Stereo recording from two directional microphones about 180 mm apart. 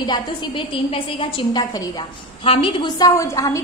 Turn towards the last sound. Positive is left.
turn(degrees=15)  # may be behind; listen again after turning